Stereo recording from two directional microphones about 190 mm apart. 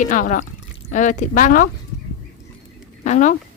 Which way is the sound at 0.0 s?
45° left (ahead or behind).